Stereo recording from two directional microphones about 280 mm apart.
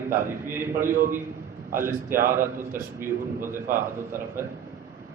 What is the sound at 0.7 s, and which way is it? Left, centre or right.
A man's voice, right.